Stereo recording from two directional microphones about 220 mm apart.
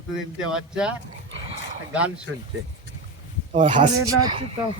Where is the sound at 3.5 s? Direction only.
30° right (ahead or behind).